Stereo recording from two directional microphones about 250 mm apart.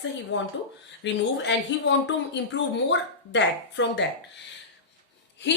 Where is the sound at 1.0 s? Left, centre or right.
Left.